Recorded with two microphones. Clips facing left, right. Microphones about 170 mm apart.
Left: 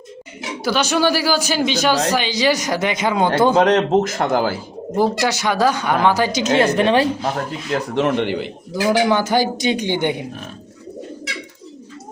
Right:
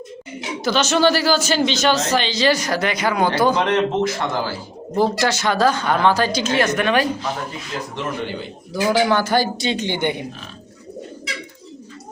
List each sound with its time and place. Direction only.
0.6 s speech: 10° left (ahead or behind)
3.5 s speech: 45° left (ahead or behind)
4.9 s a woman's voice: 15° left (ahead or behind)
7.9 s a man's voice: 75° left (ahead or behind)
8.7 s speech: 15° left (ahead or behind)